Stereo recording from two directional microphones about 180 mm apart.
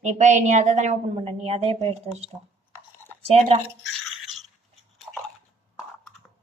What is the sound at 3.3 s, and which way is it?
Speech, 35° right (ahead or behind).